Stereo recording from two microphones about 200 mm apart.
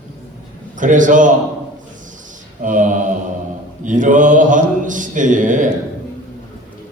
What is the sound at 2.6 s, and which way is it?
A man's voice, 40° right (ahead or behind).